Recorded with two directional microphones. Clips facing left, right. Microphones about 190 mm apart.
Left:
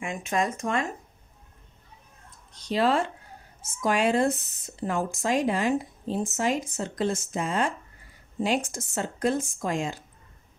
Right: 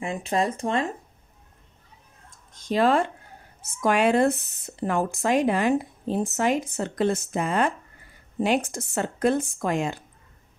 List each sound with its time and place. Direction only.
0.0 s speech: 35° right (ahead or behind)
2.5 s speech: 50° right (ahead or behind)